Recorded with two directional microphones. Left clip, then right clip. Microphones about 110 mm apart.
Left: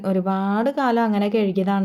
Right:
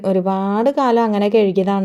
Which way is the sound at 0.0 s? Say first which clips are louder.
Right 5 dB; 30° right (ahead or behind).